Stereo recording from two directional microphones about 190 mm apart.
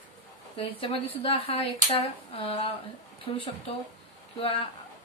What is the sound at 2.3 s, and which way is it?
Speech, 30° left (ahead or behind).